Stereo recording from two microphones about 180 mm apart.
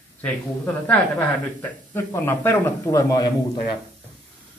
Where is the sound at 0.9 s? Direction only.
10° left (ahead or behind).